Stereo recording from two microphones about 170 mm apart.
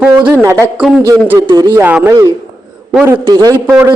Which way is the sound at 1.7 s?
10° right (ahead or behind).